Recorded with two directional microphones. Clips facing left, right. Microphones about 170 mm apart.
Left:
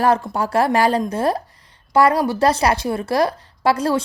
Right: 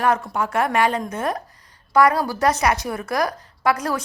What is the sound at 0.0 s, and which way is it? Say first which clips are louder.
A woman's voice: left 3 dB; 35° left (ahead or behind).